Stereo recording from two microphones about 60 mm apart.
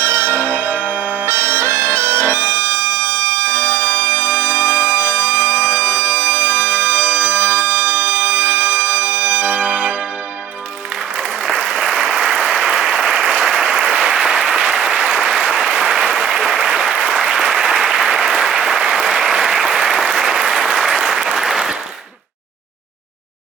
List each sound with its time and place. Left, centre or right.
0.0 s music: right
6.3 s bagpipes: right
6.7 s bagpipes: centre
7.6 s bagpipes: right
9.6 s change ringing: centre
11.4 s applause: centre